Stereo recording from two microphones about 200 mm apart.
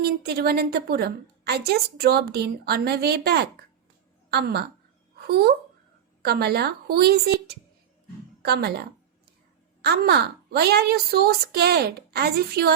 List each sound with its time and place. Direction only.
0.0 s a woman's voice: 55° right (ahead or behind)
8.4 s a sound: 55° right (ahead or behind)
9.8 s a woman's voice: 55° right (ahead or behind)